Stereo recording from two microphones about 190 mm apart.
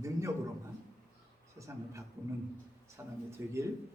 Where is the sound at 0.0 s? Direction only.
15° right (ahead or behind).